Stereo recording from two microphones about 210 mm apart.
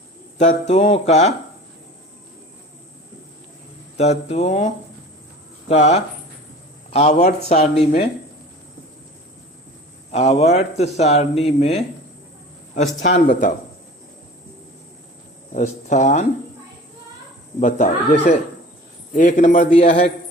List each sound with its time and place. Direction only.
0.3 s speech: 35° left (ahead or behind)
3.9 s speech: 30° left (ahead or behind)
10.1 s speech: 30° left (ahead or behind)
15.5 s speech: 35° left (ahead or behind)
17.6 s speech: 40° left (ahead or behind)